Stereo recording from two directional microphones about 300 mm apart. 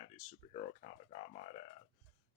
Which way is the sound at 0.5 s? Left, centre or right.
Centre.